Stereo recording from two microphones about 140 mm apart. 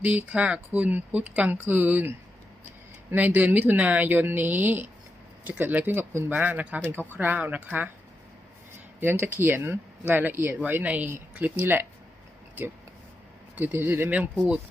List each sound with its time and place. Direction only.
0.0 s speech: 10° right (ahead or behind)
9.0 s speech: 15° right (ahead or behind)
13.6 s speech: 15° right (ahead or behind)